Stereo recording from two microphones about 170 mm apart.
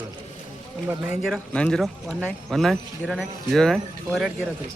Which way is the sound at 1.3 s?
5° left (ahead or behind).